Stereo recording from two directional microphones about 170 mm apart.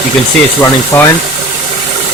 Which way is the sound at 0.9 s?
10° left (ahead or behind).